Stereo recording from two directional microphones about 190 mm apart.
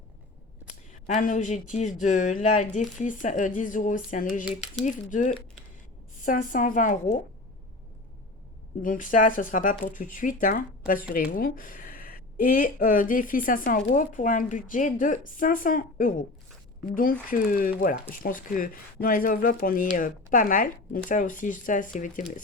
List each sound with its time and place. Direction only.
1.0 s speech: 40° left (ahead or behind)
8.8 s speech: 45° left (ahead or behind)